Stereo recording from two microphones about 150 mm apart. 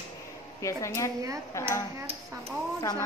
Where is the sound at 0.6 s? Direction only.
20° left (ahead or behind).